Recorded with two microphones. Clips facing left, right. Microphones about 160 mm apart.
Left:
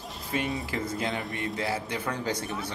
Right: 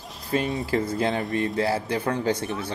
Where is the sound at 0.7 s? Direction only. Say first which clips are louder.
Right 7 dB; 35° right (ahead or behind).